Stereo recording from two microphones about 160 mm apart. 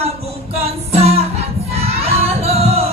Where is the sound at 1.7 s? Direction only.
40° right (ahead or behind).